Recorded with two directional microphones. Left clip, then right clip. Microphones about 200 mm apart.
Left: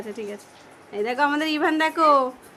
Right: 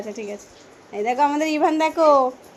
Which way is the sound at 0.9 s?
5° left (ahead or behind).